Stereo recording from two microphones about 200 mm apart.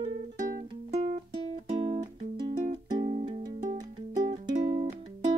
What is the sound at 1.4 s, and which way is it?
Music, 30° right (ahead or behind).